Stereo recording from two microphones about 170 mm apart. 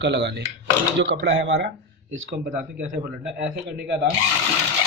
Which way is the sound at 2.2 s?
70° right (ahead or behind).